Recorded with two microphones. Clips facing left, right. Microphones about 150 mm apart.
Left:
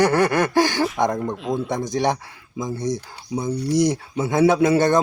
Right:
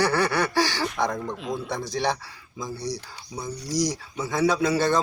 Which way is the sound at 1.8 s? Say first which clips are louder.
Left 4 dB; 50° left (ahead or behind).